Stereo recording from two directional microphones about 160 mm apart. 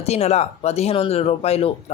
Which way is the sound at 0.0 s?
40° left (ahead or behind).